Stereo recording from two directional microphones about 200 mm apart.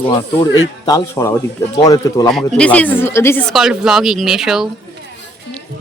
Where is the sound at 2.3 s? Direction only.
5° left (ahead or behind).